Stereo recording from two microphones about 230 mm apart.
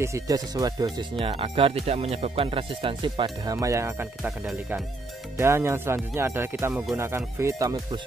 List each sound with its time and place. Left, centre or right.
0.0 s speech: centre